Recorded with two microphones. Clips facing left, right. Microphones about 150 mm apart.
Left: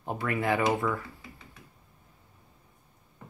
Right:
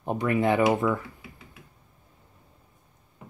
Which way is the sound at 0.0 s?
20° right (ahead or behind).